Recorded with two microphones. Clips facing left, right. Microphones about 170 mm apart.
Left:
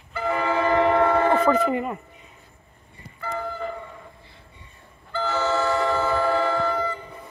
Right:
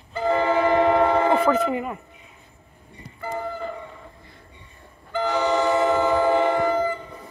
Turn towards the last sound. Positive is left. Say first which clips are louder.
# right 3 dB
turn(degrees=-20)  # may be behind; listen again after turning